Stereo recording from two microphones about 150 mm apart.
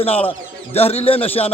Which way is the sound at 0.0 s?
40° left (ahead or behind).